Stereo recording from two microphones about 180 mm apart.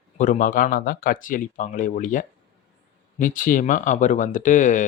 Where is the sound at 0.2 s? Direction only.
45° left (ahead or behind).